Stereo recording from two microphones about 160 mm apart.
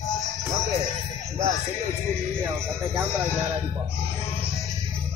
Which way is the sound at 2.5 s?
15° right (ahead or behind).